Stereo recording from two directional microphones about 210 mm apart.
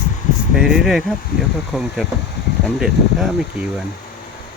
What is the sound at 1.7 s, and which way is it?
Speech, centre (ahead or behind).